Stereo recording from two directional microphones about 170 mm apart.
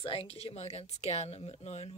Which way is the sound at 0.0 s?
30° left (ahead or behind).